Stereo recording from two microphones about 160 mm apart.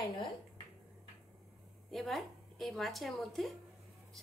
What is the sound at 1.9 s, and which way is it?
A woman's voice, centre (ahead or behind).